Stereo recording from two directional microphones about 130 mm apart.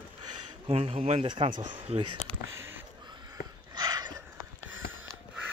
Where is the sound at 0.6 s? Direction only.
45° right (ahead or behind).